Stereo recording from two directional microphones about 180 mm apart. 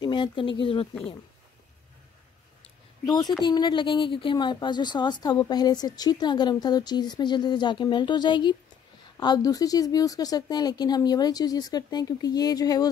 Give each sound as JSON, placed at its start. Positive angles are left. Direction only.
{"t": 0.0, "sound": "speech", "side_deg": 25}
{"t": 3.4, "sound": "speech", "side_deg": 25}